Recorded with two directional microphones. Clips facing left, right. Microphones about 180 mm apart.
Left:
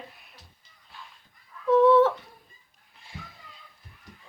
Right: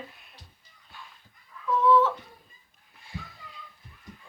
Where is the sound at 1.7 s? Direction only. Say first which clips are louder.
Left 4 dB; 60° left (ahead or behind).